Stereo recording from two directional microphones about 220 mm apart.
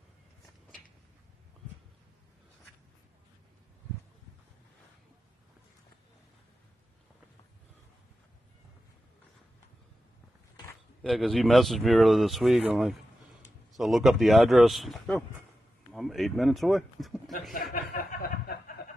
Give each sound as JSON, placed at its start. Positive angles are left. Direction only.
{"t": 11.0, "sound": "speech", "side_deg": 0}
{"t": 17.7, "sound": "snicker", "side_deg": 40}